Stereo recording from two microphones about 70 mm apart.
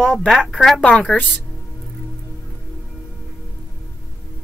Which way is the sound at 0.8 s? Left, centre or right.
Centre.